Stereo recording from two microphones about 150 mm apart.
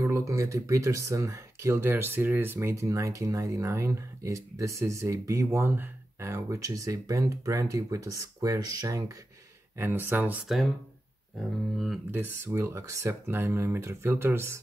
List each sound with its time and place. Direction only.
0.0 s speech: 20° right (ahead or behind)
12.1 s speech: 15° right (ahead or behind)